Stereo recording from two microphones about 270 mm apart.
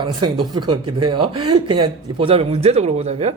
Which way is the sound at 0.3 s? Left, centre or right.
Centre.